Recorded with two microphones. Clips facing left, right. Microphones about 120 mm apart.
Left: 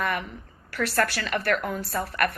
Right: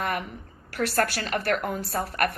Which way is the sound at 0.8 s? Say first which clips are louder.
Even; 45° right (ahead or behind).